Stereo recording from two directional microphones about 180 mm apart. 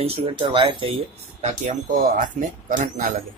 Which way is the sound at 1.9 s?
50° right (ahead or behind).